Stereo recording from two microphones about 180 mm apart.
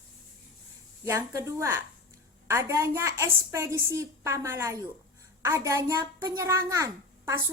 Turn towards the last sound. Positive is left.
turn(degrees=-15)  # may be behind; listen again after turning